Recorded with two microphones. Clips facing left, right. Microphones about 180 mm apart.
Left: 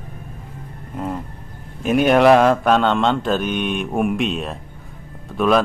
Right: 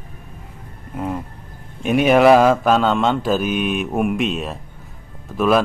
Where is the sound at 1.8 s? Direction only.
Centre (ahead or behind).